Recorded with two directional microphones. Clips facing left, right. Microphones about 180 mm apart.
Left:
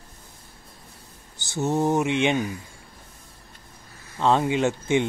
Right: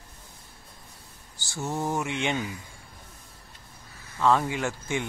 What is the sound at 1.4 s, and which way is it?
Speech, 20° left (ahead or behind).